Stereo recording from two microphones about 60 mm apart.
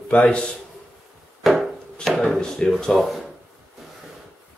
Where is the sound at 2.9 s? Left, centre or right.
Centre.